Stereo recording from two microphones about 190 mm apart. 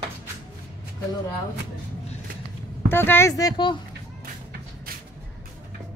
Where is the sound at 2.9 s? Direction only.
10° left (ahead or behind).